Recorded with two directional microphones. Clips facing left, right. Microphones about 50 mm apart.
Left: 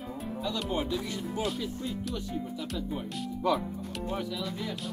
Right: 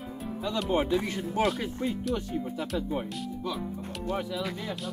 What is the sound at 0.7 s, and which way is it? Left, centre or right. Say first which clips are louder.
Speech: right 9 dB; right.